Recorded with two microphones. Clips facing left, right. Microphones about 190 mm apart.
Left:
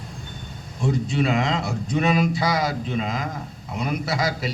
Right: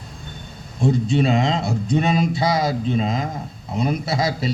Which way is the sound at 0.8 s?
25° right (ahead or behind).